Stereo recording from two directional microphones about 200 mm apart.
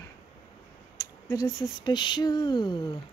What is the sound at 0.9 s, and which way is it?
Speech, 15° left (ahead or behind).